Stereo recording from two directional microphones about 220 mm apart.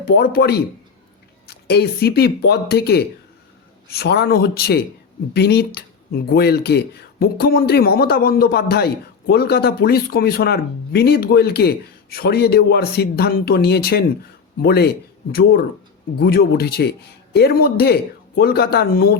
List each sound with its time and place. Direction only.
0.1 s speech: 45° left (ahead or behind)